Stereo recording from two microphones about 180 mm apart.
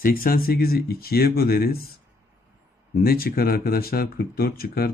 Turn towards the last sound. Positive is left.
turn(degrees=60)  # may be behind; listen again after turning